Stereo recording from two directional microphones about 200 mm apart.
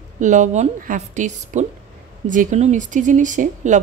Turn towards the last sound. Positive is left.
turn(degrees=-40)  # may be behind; listen again after turning